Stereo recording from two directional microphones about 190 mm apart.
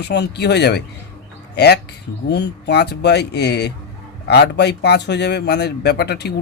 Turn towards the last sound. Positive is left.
turn(degrees=60)  # may be behind; listen again after turning